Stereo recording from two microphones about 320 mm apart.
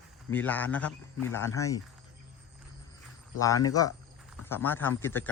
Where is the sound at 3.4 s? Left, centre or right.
Centre.